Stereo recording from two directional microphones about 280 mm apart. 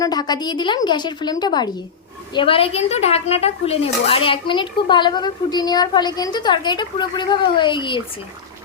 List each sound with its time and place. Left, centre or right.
0.0 s speech: centre